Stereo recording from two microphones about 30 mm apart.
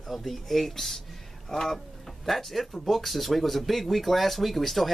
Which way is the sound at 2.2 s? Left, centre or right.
Centre.